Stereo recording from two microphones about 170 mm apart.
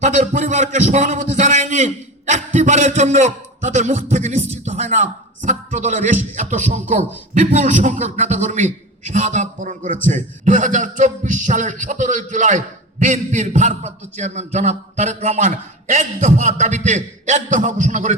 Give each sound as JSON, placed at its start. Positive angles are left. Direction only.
{"t": 0.0, "sound": "a man's voice", "side_deg": -45}